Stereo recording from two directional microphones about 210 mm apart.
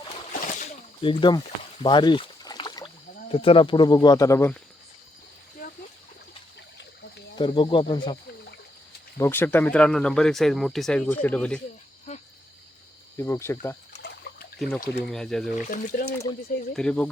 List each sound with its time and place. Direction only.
0.3 s a sound: 40° left (ahead or behind)
1.0 s speech: 25° left (ahead or behind)
7.3 s speech: 25° left (ahead or behind)
9.1 s speech: 10° left (ahead or behind)
13.1 s speech: 10° left (ahead or behind)
14.3 s pour: 50° left (ahead or behind)
15.0 s speech: centre (ahead or behind)
15.6 s speech: 40° left (ahead or behind)
16.7 s speech: 5° left (ahead or behind)